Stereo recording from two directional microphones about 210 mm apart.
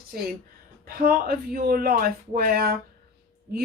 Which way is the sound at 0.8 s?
45° right (ahead or behind).